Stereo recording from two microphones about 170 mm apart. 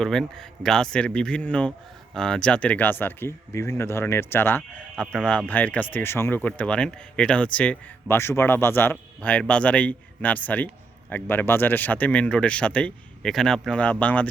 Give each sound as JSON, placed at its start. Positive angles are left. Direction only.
{"t": 0.0, "sound": "a man's voice", "side_deg": 5}